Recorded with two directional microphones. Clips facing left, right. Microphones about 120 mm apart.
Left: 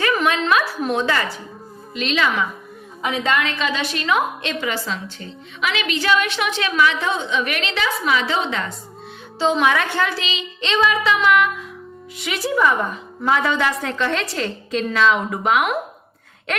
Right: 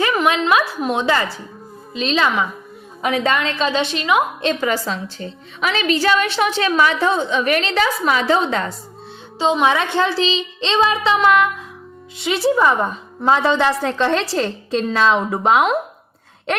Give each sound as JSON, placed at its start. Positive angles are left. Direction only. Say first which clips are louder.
{"t": 0.0, "sound": "a sound", "louder": "right 2 dB", "side_deg": -20}
{"t": 0.8, "sound": "a woman's voice", "louder": "right 2 dB", "side_deg": -20}
{"t": 4.6, "sound": "a woman's voice", "louder": "right 4 dB", "side_deg": -40}
{"t": 9.4, "sound": "a woman's voice", "louder": "right 1 dB", "side_deg": -20}